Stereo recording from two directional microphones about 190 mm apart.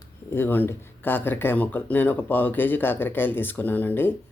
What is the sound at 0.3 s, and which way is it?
Speech, 10° left (ahead or behind).